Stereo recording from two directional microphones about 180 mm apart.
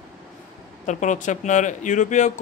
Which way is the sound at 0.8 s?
45° left (ahead or behind).